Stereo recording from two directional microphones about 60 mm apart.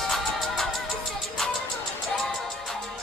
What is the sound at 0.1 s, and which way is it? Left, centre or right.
Music, centre.